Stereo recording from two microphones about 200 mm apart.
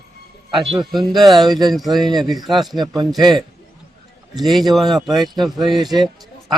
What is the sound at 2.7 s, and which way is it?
Speech, 20° right (ahead or behind).